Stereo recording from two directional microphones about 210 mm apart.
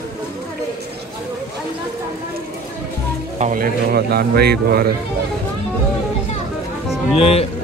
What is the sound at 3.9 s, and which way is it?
Speech, 50° right (ahead or behind).